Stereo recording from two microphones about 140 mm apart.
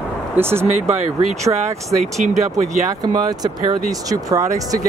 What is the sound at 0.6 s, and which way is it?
Speech, 55° right (ahead or behind).